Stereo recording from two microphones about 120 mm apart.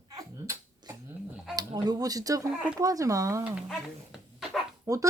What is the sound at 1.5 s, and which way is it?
Speech, 35° right (ahead or behind).